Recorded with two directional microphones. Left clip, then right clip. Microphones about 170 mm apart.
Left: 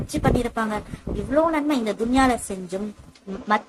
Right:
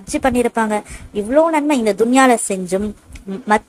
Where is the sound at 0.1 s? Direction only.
30° right (ahead or behind).